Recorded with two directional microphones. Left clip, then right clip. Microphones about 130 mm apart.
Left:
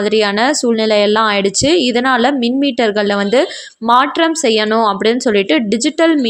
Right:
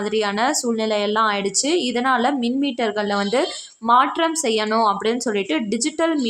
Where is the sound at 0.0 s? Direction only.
30° left (ahead or behind).